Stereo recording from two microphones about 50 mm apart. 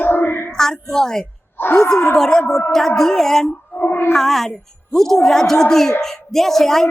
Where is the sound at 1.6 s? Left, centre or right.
Left.